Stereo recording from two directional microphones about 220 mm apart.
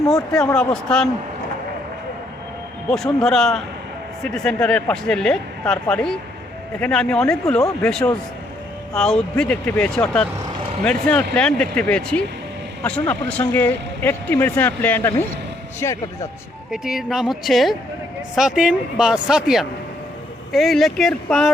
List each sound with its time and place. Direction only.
0.2 s speech: 15° left (ahead or behind)
2.9 s speech: centre (ahead or behind)
11.3 s speech: 5° left (ahead or behind)
16.7 s speech: centre (ahead or behind)